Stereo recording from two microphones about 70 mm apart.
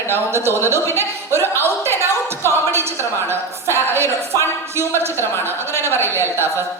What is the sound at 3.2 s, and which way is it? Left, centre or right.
A woman's voice, right.